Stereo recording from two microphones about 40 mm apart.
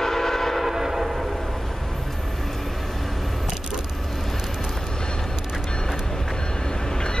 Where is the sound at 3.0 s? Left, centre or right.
Centre.